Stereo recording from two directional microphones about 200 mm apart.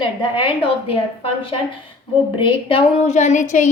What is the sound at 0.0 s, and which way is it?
A woman's voice, 25° left (ahead or behind).